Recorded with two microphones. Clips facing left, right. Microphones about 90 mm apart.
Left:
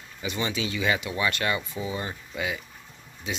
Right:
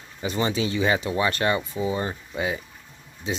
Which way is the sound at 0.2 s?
35° right (ahead or behind).